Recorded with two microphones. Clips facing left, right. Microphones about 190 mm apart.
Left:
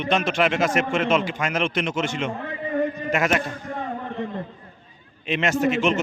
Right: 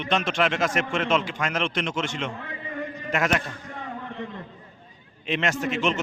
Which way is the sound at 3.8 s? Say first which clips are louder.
Left 5 dB; 45° left (ahead or behind).